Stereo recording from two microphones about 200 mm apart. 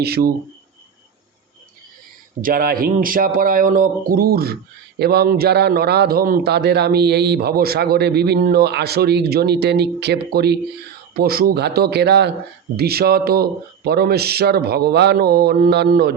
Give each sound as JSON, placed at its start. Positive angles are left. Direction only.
{"t": 0.0, "sound": "a man's voice", "side_deg": -50}
{"t": 2.4, "sound": "a man's voice", "side_deg": -45}